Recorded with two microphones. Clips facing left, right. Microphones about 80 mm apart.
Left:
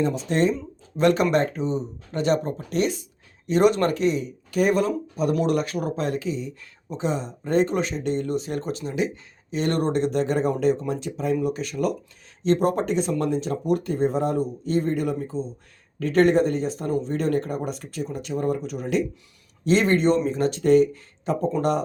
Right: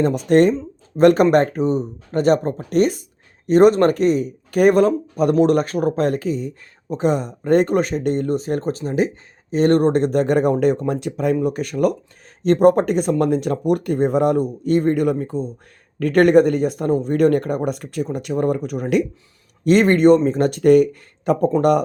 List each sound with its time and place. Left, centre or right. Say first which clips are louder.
0.0 s speech: right 7 dB; right
0.9 s speech: right 7 dB; right
5.4 s speech: right 7 dB; right